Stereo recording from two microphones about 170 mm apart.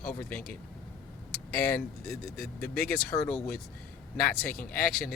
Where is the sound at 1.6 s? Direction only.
10° left (ahead or behind).